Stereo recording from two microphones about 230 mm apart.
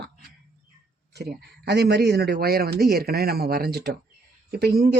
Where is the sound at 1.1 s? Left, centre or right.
Right.